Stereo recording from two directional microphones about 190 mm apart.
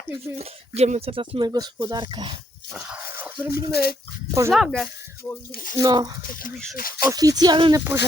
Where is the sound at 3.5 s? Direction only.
55° left (ahead or behind).